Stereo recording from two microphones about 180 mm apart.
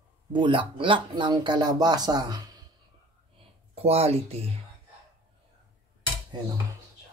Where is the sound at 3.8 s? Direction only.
35° right (ahead or behind).